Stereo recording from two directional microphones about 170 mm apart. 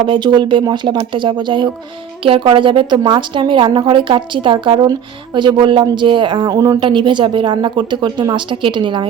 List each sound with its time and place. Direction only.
0.1 s a woman's voice: 25° right (ahead or behind)